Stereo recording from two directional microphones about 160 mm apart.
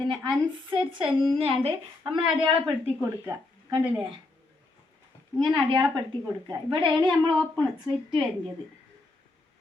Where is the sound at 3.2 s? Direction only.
20° right (ahead or behind).